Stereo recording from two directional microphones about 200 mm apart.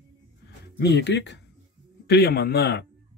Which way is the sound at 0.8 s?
55° left (ahead or behind).